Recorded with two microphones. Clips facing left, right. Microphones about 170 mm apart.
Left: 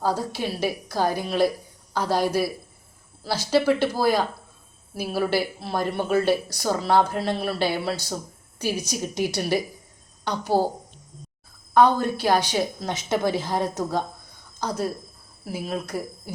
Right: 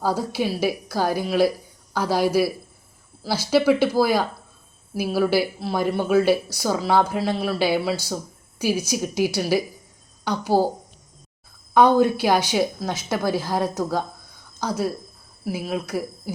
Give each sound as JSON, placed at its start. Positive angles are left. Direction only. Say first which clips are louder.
{"t": 0.0, "sound": "a woman's voice", "louder": "right 2 dB", "side_deg": -10}
{"t": 3.5, "sound": "a woman's voice", "louder": "right 3 dB", "side_deg": -10}
{"t": 11.7, "sound": "a woman's voice", "louder": "right 3 dB", "side_deg": -10}